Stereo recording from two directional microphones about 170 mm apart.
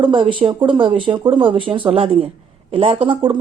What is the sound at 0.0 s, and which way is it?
Speech, 30° right (ahead or behind).